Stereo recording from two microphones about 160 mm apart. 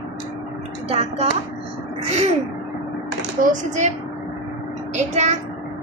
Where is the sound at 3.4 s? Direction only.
50° right (ahead or behind).